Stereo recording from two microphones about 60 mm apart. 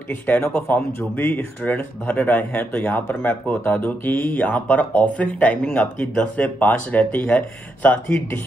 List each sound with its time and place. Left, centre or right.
0.4 s speech: left
3.6 s speech: left